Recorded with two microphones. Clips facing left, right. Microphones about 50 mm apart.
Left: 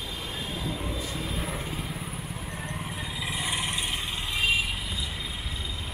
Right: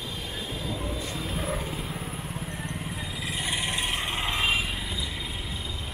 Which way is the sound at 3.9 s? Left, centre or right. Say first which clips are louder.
Right 3 dB; right.